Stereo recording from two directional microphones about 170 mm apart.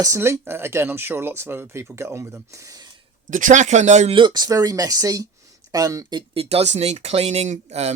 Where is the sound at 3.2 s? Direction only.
50° right (ahead or behind).